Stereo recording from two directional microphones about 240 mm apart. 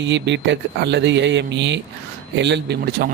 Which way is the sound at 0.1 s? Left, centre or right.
Right.